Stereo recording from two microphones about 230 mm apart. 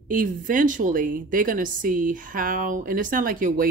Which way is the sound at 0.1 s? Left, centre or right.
Right.